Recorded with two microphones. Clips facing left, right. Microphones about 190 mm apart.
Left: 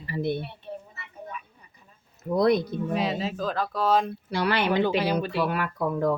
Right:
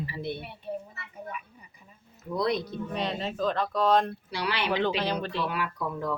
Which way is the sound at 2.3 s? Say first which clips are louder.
Left 6 dB; 50° left (ahead or behind).